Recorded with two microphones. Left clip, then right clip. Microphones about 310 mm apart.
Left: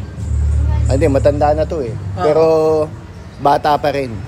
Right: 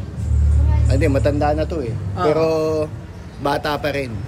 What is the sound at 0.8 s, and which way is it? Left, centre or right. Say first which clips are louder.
Speech: left 6 dB; centre.